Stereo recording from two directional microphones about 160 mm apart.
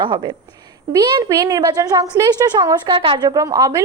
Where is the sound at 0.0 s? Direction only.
30° right (ahead or behind).